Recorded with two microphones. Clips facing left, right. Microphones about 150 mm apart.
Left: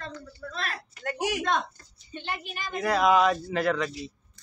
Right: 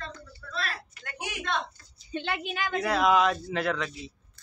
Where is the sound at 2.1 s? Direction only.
90° right.